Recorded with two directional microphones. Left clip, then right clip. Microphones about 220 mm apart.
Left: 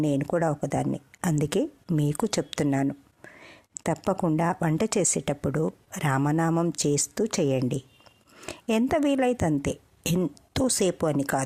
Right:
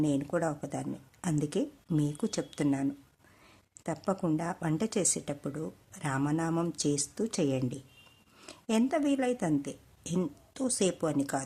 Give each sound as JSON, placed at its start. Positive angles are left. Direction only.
{"t": 0.0, "sound": "speech", "side_deg": 35}